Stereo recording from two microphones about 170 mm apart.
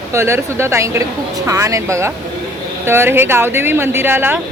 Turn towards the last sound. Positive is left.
turn(degrees=-10)  # may be behind; listen again after turning